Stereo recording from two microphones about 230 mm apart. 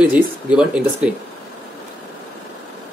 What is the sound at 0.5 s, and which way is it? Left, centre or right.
Speech, centre.